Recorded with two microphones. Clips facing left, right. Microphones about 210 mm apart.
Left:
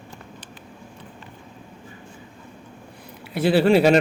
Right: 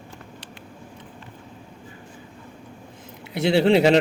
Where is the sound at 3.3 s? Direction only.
20° right (ahead or behind).